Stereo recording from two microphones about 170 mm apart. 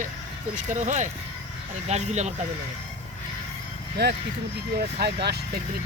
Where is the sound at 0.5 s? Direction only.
45° right (ahead or behind).